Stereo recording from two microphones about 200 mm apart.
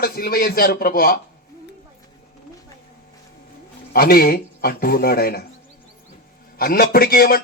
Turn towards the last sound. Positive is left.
turn(degrees=45)  # may be behind; listen again after turning